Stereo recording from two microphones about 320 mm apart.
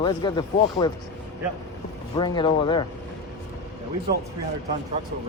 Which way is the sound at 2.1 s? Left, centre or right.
Centre.